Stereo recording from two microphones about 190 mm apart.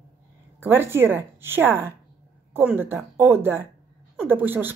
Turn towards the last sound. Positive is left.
turn(degrees=-10)  # may be behind; listen again after turning